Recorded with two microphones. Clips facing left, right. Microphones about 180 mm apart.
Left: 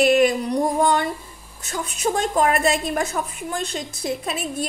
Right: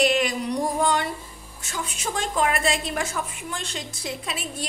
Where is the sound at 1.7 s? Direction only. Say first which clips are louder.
Left 6 dB; 40° left (ahead or behind).